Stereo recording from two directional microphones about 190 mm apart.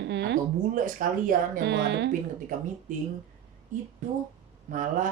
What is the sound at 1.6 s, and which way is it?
Speech, 65° right (ahead or behind).